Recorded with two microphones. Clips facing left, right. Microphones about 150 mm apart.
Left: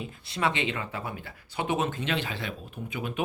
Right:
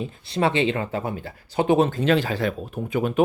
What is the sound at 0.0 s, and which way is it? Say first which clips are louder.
Speech: right 6 dB; 30° right (ahead or behind).